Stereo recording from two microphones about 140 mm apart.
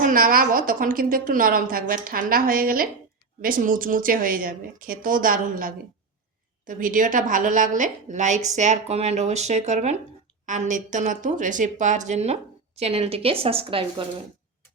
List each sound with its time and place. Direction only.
0.0 s a woman's voice: 80° right
3.4 s a woman's voice: 80° right; by 14.0 s 40° right (ahead or behind)